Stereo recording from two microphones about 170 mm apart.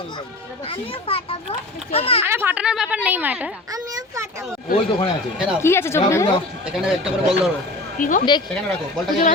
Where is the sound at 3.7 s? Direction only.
20° right (ahead or behind).